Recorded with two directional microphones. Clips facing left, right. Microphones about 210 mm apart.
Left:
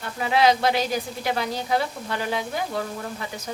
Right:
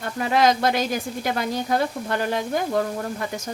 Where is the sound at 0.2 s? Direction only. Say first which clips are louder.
Even; 45° right (ahead or behind).